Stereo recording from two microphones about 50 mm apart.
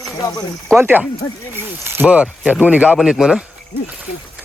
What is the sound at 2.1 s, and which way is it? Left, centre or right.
Speech, right.